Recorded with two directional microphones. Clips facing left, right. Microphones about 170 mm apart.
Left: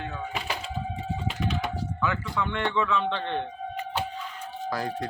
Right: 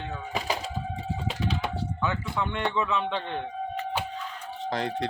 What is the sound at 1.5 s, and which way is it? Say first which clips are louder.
Speech: right 1 dB; 25° right (ahead or behind).